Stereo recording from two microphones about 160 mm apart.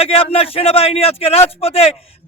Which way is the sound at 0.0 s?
35° left (ahead or behind).